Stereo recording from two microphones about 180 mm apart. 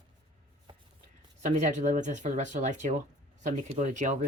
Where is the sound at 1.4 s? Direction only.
40° right (ahead or behind).